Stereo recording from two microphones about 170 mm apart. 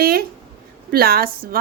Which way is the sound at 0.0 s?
65° right (ahead or behind).